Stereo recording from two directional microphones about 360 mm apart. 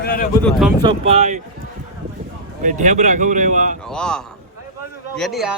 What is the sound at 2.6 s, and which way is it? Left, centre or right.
Speech, right.